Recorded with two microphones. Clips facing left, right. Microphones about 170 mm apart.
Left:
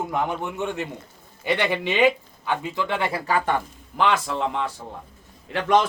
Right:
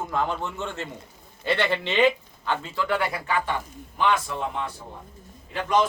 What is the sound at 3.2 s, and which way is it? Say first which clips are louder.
Speech: left 4 dB; 40° left (ahead or behind).